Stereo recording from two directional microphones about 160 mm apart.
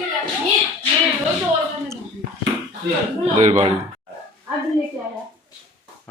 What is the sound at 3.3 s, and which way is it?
Speech, 45° right (ahead or behind).